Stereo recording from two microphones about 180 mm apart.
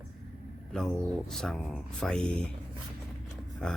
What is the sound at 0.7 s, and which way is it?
Speech, centre (ahead or behind).